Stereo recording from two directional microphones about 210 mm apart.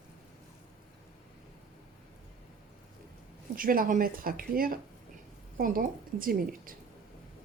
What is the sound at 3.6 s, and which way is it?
A woman's voice, 45° right (ahead or behind).